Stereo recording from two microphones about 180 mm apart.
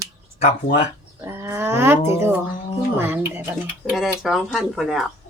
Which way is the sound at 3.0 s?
10° right (ahead or behind).